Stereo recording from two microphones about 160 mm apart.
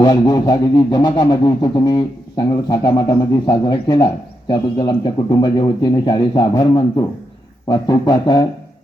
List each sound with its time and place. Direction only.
0.0 s speech: 25° left (ahead or behind)